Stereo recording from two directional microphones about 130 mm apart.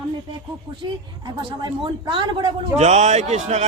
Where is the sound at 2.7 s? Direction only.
60° right (ahead or behind).